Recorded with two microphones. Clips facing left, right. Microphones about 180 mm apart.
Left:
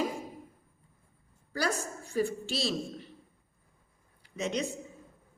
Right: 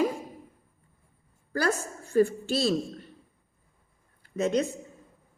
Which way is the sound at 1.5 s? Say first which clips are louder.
Right 4 dB; 50° right (ahead or behind).